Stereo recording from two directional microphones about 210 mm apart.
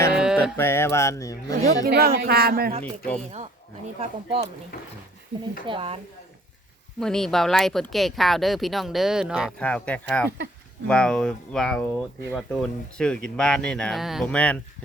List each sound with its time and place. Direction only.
0.1 s sheep: 5° right (ahead or behind)
0.5 s speech: 10° left (ahead or behind)
1.6 s speech: 45° right (ahead or behind)
5.6 s speech: 25° right (ahead or behind)
7.0 s speech: centre (ahead or behind)